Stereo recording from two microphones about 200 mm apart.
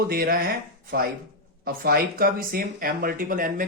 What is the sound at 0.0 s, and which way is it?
Speech, 50° right (ahead or behind).